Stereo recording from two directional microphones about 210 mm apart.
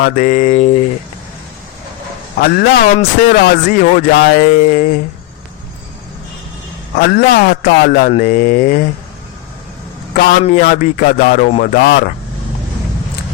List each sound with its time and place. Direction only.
0.0 s speech: 40° left (ahead or behind)
2.4 s speech: 45° left (ahead or behind)
6.9 s speech: 45° left (ahead or behind)
10.2 s speech: 40° left (ahead or behind)